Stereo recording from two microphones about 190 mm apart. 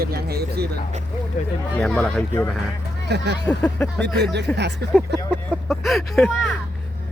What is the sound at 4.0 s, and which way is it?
Speech, 65° right (ahead or behind).